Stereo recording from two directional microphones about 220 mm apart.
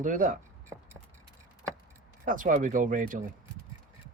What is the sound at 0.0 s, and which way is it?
Speech, 35° right (ahead or behind).